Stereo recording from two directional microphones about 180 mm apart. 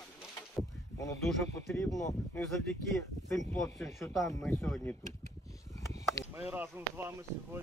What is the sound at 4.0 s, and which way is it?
Speech, centre (ahead or behind).